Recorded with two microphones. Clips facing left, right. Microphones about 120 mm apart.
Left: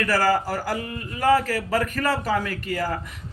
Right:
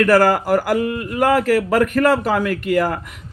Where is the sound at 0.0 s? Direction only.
65° right (ahead or behind).